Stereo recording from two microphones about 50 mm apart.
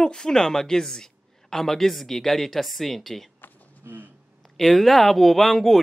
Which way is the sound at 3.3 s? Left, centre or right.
Left.